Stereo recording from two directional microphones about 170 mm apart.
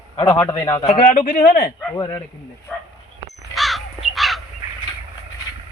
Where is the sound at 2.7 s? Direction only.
Centre (ahead or behind).